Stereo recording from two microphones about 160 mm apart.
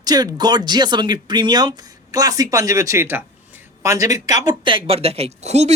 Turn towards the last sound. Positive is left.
turn(degrees=-45)  # may be behind; listen again after turning